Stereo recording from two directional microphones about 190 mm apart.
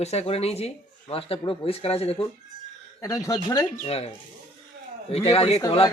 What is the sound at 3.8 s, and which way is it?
Speech, 35° left (ahead or behind).